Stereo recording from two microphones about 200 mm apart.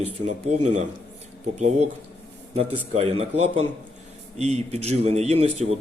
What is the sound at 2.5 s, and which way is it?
A man's voice, 30° right (ahead or behind).